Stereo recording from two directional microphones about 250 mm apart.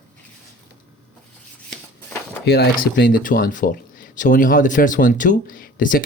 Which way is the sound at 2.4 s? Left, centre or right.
Left.